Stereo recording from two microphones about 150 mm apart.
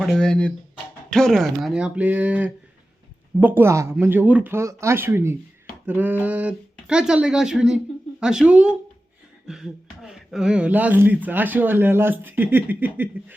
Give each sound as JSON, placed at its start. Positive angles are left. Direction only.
{"t": 0.0, "sound": "speech", "side_deg": 5}